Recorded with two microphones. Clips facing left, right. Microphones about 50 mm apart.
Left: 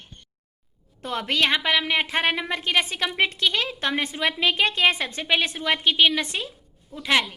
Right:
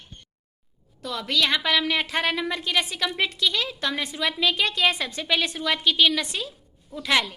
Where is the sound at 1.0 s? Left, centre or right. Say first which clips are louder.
Left 2 dB; left.